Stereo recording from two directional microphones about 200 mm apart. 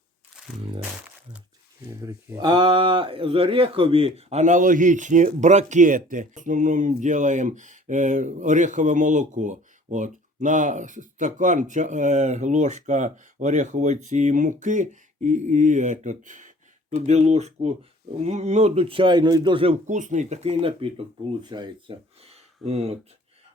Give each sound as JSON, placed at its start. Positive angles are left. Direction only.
{"t": 2.0, "sound": "a man's voice", "side_deg": -15}